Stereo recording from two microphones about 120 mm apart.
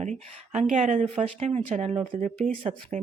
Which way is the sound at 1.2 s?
65° right (ahead or behind).